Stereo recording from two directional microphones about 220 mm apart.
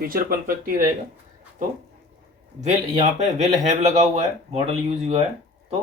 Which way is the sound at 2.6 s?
30° right (ahead or behind).